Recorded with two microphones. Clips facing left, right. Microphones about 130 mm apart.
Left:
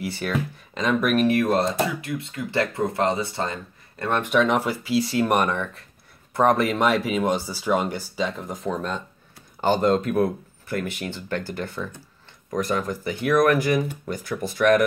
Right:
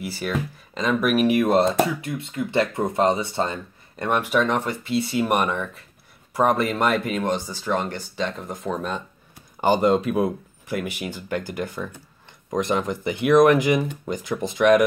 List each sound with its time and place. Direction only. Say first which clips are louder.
0.0 s speech: even; centre (ahead or behind)
1.2 s speech: right 2 dB; 15° right (ahead or behind)
4.0 s speech: right 1 dB; 15° right (ahead or behind)
4.3 s speech: left 1 dB; centre (ahead or behind); by 14.9 s 15° right (ahead or behind)